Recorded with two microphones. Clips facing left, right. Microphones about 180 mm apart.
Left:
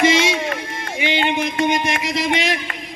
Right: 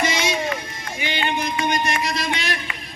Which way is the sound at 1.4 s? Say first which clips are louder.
Left 4 dB; 75° left (ahead or behind).